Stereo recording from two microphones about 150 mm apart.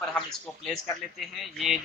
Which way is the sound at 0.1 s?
5° left (ahead or behind).